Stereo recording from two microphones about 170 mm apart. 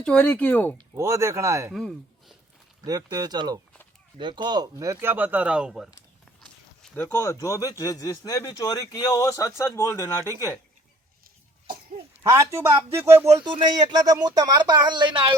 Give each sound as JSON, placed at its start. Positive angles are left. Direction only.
{"t": 0.0, "sound": "speech", "side_deg": 5}
{"t": 0.9, "sound": "speech", "side_deg": -15}
{"t": 1.7, "sound": "speech", "side_deg": 0}
{"t": 2.8, "sound": "speech", "side_deg": -20}
{"t": 6.9, "sound": "speech", "side_deg": 15}
{"t": 12.2, "sound": "speech", "side_deg": -15}
{"t": 13.3, "sound": "speech", "side_deg": -25}